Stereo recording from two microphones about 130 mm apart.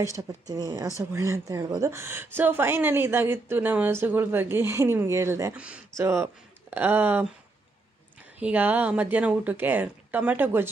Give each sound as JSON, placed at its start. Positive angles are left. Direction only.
{"t": 0.0, "sound": "a woman's voice", "side_deg": -25}
{"t": 8.4, "sound": "speech", "side_deg": -10}